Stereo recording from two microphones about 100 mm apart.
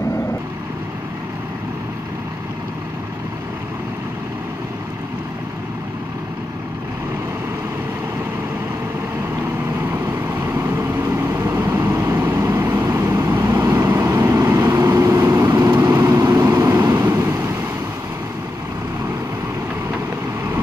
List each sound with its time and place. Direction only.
9.8 s vehicle: 25° right (ahead or behind)